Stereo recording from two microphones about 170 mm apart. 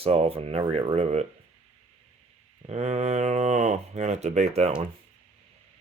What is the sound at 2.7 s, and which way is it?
Speech, 40° right (ahead or behind).